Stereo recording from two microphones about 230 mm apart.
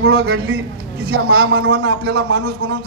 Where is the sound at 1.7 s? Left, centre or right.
Right.